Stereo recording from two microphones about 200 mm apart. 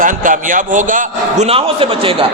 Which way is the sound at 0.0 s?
40° right (ahead or behind).